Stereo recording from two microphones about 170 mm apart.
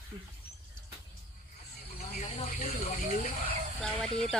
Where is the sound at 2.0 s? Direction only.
40° left (ahead or behind).